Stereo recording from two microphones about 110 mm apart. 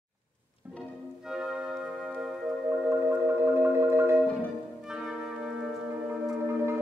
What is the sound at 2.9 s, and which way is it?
Marimba, 20° right (ahead or behind).